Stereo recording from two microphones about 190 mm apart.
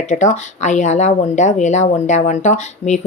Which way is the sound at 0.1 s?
40° left (ahead or behind).